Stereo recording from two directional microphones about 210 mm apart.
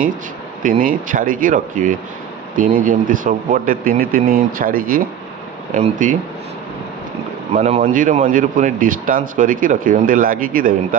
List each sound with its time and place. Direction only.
0.6 s speech: 40° right (ahead or behind)
7.5 s speech: 35° right (ahead or behind)